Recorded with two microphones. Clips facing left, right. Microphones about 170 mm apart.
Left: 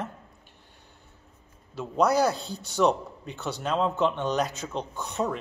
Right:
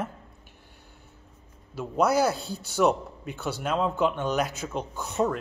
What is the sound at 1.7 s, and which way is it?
A man's voice, 5° right (ahead or behind).